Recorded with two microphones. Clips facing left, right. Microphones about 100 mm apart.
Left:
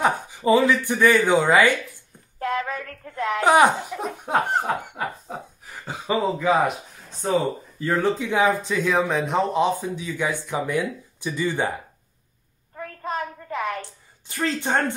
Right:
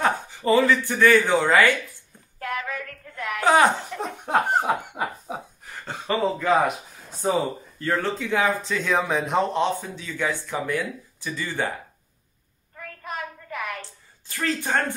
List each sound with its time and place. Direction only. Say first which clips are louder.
0.0 s speech: left 2 dB; 15° left (ahead or behind)
2.4 s a sound: left 4 dB; 30° left (ahead or behind)
3.4 s speech: left 1 dB; 15° left (ahead or behind)
4.6 s snicker: right 1 dB; 10° right (ahead or behind)
5.7 s speech: left 1 dB; 5° left (ahead or behind)
7.2 s speech: left 1 dB; 10° right (ahead or behind)
7.8 s speech: left 3 dB; 15° left (ahead or behind)
8.8 s speech: left 1 dB; centre (ahead or behind); by 11.7 s 20° left (ahead or behind)
12.7 s child singing: left 5 dB; 30° left (ahead or behind)
13.7 s a sound: left 5 dB; 20° left (ahead or behind)